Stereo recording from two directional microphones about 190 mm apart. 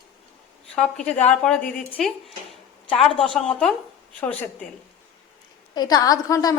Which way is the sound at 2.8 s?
30° left (ahead or behind).